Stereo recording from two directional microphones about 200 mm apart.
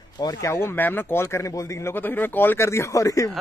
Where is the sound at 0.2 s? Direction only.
15° left (ahead or behind).